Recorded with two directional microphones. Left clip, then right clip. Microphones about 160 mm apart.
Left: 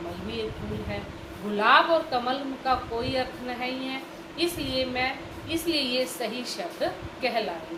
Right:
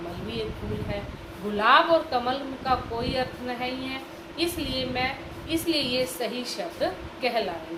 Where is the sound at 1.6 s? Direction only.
35° right (ahead or behind).